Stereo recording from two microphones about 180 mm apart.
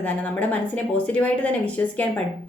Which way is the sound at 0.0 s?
10° left (ahead or behind).